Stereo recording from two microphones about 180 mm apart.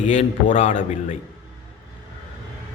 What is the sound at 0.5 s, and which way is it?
Speech, 45° left (ahead or behind).